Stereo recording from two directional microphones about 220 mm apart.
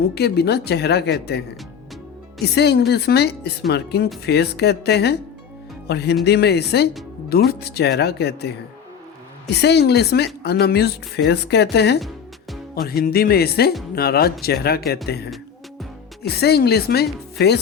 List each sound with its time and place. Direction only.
0.1 s a woman's voice: 45° left (ahead or behind)
2.4 s a woman's voice: 50° left (ahead or behind)
9.5 s a woman's voice: 50° left (ahead or behind)
11.9 s music: centre (ahead or behind)
12.7 s a woman's voice: 45° left (ahead or behind)